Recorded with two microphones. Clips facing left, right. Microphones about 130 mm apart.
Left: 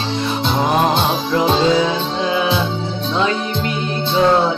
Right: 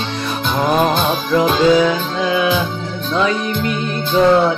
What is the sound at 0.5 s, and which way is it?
Music, 30° left (ahead or behind).